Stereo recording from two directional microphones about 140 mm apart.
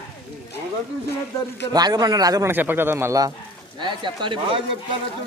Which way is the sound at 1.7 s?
30° right (ahead or behind).